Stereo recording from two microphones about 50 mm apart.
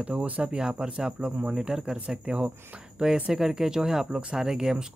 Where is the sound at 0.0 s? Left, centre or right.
Right.